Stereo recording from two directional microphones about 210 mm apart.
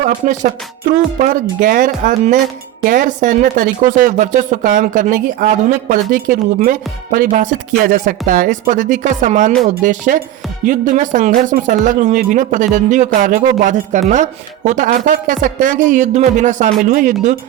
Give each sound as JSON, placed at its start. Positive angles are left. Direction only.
{"t": 0.0, "sound": "speech", "side_deg": -35}